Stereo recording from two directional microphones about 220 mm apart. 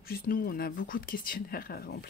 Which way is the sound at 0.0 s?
40° left (ahead or behind).